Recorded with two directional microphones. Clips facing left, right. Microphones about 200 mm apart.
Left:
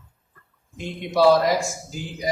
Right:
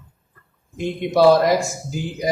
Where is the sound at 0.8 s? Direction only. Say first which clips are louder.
Right 4 dB; 55° right (ahead or behind).